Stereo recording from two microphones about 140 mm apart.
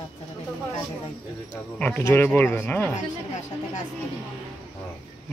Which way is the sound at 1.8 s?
10° left (ahead or behind).